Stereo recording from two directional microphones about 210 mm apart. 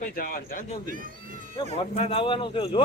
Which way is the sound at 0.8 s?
40° right (ahead or behind).